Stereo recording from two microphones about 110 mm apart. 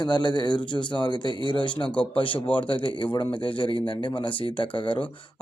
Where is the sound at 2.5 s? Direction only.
50° left (ahead or behind).